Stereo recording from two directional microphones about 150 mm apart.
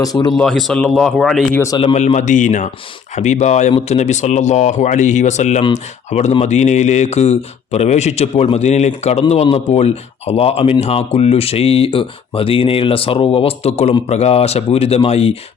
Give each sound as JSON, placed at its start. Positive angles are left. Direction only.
{"t": 0.0, "sound": "speech", "side_deg": 25}
{"t": 0.3, "sound": "speech", "side_deg": 0}
{"t": 1.8, "sound": "speech", "side_deg": 45}